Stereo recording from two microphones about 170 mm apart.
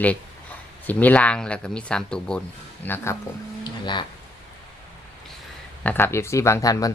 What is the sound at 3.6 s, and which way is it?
Music, 25° left (ahead or behind).